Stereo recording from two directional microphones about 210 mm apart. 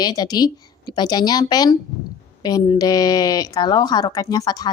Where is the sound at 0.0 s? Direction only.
20° left (ahead or behind).